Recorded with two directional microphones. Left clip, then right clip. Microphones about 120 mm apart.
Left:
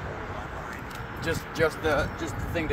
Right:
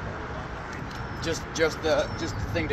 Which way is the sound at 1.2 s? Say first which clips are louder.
Even; 65° left (ahead or behind).